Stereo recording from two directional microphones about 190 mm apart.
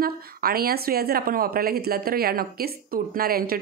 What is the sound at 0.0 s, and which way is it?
A woman's voice, 50° right (ahead or behind).